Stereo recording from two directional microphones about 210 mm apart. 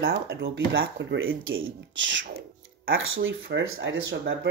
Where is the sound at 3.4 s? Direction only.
55° right (ahead or behind).